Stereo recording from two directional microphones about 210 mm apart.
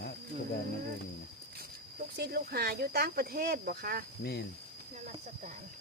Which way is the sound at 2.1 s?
50° right (ahead or behind).